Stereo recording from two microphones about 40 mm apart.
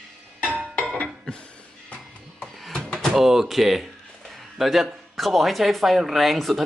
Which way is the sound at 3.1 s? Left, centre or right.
Centre.